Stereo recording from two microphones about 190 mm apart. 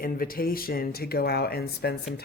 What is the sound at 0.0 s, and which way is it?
Speech, 50° left (ahead or behind).